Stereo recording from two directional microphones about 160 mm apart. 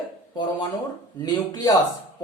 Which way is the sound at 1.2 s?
25° left (ahead or behind).